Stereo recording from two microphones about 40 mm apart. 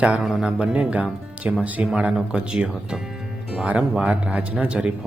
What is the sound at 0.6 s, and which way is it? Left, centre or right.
Speech, right.